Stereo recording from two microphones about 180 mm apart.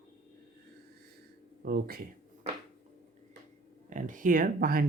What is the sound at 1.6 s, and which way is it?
Speech, 60° right (ahead or behind).